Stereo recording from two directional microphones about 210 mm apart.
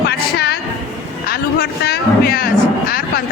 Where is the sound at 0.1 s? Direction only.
50° left (ahead or behind).